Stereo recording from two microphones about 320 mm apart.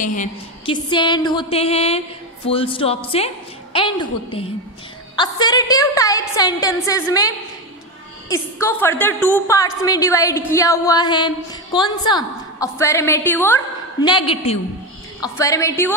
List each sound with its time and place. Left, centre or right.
0.0 s a woman's voice: left; by 15.9 s centre